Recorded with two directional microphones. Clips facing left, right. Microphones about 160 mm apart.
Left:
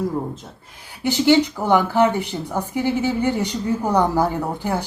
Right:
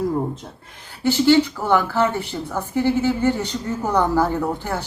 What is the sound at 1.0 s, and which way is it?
Speech, 15° left (ahead or behind).